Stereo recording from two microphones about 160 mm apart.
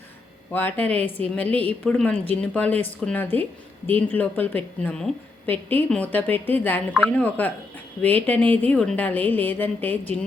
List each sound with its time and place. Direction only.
0.5 s a woman's voice: 10° left (ahead or behind)